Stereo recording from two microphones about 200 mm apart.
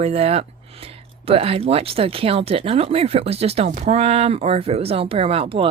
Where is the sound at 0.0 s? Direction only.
30° right (ahead or behind).